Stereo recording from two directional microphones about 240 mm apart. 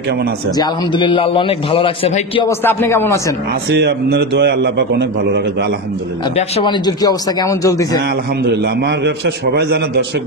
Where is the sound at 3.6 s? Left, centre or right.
Right.